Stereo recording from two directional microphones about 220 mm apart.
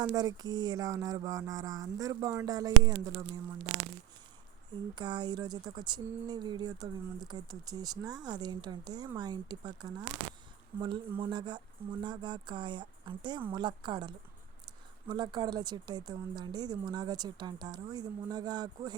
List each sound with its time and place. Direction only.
0.0 s music: 15° right (ahead or behind)
4.9 s speech: 20° right (ahead or behind)